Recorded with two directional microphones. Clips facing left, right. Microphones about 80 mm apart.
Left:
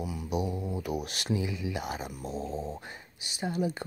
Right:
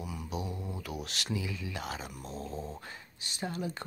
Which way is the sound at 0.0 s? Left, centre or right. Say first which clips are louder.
Left 5 dB; centre.